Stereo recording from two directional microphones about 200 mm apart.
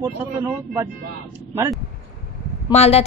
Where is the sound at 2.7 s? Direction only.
30° left (ahead or behind).